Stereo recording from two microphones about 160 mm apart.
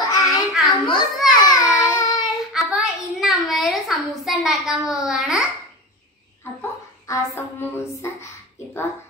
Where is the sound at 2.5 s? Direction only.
5° right (ahead or behind).